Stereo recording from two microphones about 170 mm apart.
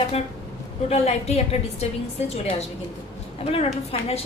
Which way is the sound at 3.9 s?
35° left (ahead or behind).